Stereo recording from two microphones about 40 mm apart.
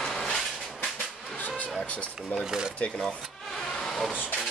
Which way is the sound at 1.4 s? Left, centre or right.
Left.